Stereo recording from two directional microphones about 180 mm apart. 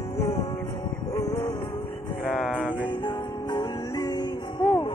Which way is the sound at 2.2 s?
5° left (ahead or behind).